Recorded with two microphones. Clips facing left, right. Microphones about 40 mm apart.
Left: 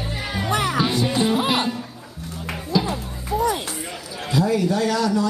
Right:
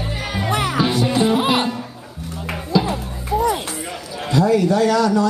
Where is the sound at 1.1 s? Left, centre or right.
Centre.